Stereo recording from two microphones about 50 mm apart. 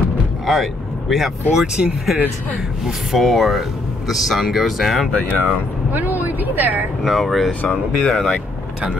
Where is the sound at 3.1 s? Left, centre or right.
Centre.